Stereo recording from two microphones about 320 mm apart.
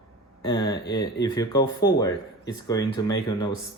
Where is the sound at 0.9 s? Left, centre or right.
Centre.